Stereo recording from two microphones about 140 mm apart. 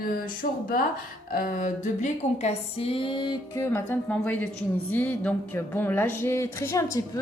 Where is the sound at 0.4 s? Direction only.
85° left.